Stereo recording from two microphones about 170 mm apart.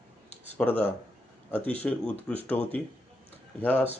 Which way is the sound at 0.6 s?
10° left (ahead or behind).